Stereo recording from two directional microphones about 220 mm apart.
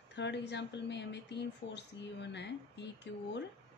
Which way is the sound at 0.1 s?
50° left (ahead or behind).